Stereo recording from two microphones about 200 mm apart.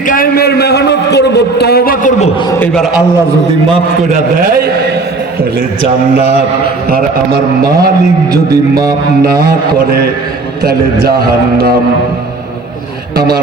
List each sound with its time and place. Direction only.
0.1 s a man's voice: 50° left (ahead or behind)
2.5 s a man's voice: 5° left (ahead or behind)
3.7 s a man's voice: 40° right (ahead or behind)
6.9 s a man's voice: 50° right (ahead or behind)
11.0 s a man's voice: 45° right (ahead or behind)